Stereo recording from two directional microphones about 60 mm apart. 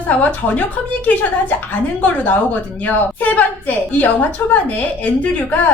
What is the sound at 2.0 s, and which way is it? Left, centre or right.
A woman's voice, left.